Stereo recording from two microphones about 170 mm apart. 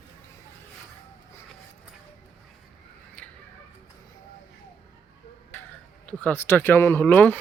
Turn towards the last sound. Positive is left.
turn(degrees=10)  # may be behind; listen again after turning